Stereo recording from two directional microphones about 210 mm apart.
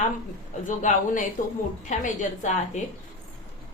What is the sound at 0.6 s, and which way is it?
A woman's voice, 35° left (ahead or behind).